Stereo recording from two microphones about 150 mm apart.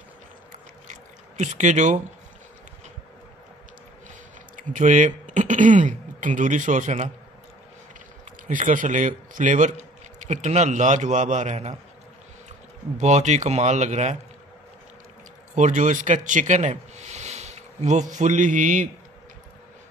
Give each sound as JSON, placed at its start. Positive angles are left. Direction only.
{"t": 0.5, "sound": "a sound", "side_deg": -55}
{"t": 4.6, "sound": "speech", "side_deg": -55}
{"t": 8.3, "sound": "a man's voice", "side_deg": -60}
{"t": 12.9, "sound": "a man's voice", "side_deg": -50}
{"t": 15.5, "sound": "speech", "side_deg": -55}